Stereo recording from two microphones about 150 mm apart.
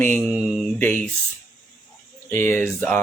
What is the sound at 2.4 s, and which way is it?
Speech, 10° left (ahead or behind).